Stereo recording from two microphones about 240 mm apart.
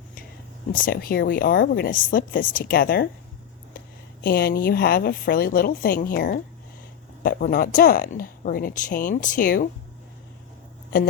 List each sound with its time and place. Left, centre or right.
0.7 s speech: left
4.2 s speech: left